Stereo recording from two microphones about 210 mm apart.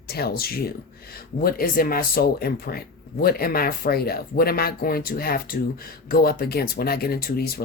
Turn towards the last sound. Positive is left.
turn(degrees=45)  # may be behind; listen again after turning